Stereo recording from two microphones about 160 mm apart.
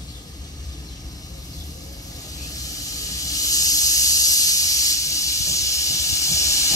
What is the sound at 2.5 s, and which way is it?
Snake, 20° left (ahead or behind).